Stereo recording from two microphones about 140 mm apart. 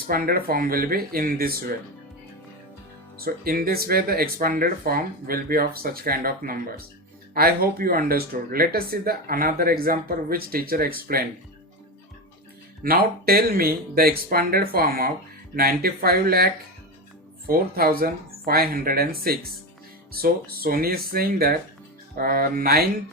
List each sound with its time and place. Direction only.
0.1 s speech: 90° right
3.2 s speech: 90° right
12.8 s speech: 90° right
17.5 s speech: 90° right